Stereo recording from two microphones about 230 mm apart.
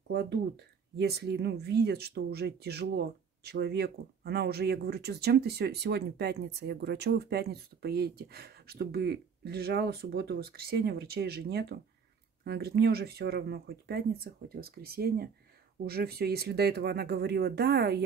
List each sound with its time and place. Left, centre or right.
0.1 s speech: right